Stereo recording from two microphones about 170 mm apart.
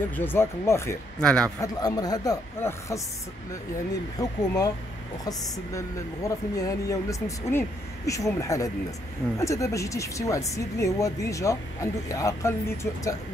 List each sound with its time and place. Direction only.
0.1 s speech: 10° left (ahead or behind)
1.2 s a man's voice: 5° left (ahead or behind)
1.6 s speech: 20° left (ahead or behind)
4.2 s speech: 20° left (ahead or behind)